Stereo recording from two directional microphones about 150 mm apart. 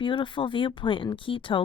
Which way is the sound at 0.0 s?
35° left (ahead or behind).